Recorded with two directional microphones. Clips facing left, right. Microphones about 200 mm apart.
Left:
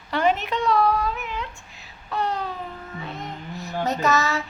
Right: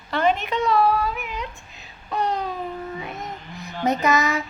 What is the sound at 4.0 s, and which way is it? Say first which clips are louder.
Child singing: left 1 dB; 15° right (ahead or behind).